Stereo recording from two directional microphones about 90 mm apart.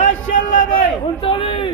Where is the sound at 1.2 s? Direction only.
75° left (ahead or behind).